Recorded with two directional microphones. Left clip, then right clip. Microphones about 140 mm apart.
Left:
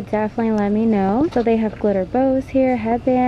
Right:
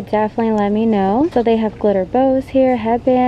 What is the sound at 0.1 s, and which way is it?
Speech, 10° right (ahead or behind).